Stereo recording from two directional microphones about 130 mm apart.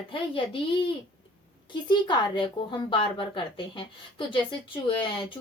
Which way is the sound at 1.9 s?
35° left (ahead or behind).